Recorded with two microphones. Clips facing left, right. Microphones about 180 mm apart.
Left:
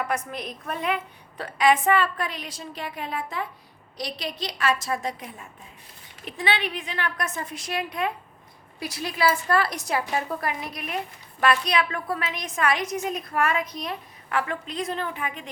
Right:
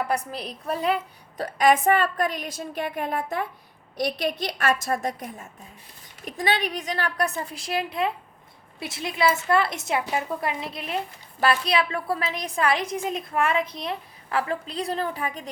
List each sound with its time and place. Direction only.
0.3 s a woman's voice: 35° right (ahead or behind)
1.4 s a woman's voice: 45° right (ahead or behind)